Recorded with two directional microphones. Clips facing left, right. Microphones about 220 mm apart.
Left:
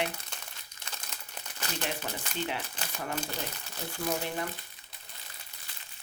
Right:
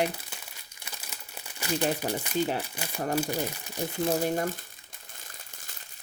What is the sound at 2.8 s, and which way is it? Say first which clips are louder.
Speech: right 7 dB; 10° right (ahead or behind).